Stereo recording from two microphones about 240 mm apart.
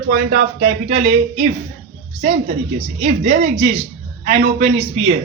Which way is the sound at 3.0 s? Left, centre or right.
Right.